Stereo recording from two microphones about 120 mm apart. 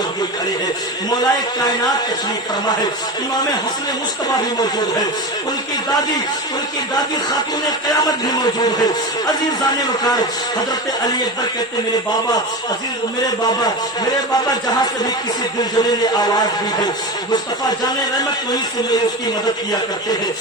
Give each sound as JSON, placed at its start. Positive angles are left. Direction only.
{"t": 1.2, "sound": "a man's voice", "side_deg": 30}
{"t": 7.9, "sound": "a man's voice", "side_deg": 35}
{"t": 13.4, "sound": "a man's voice", "side_deg": 35}